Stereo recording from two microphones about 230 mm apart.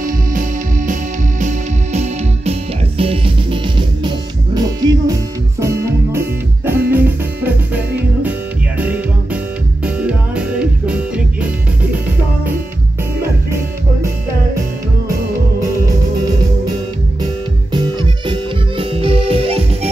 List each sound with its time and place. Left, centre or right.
0.0 s music: right; by 12.0 s centre
17.7 s music: right